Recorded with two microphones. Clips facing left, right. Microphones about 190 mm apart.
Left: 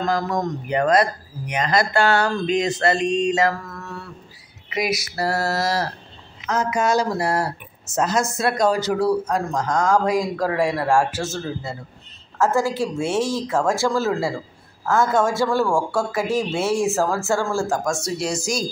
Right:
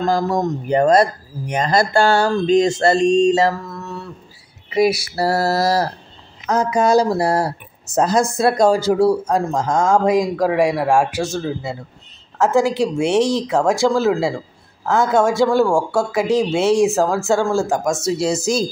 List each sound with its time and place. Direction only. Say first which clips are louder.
0.0 s speech: right 4 dB; 25° right (ahead or behind)
4.6 s a sound: right 8 dB; 30° right (ahead or behind)
6.4 s speech: right 5 dB; 35° right (ahead or behind)